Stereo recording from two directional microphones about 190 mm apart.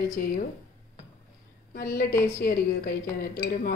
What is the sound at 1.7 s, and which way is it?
A woman's voice, 50° left (ahead or behind).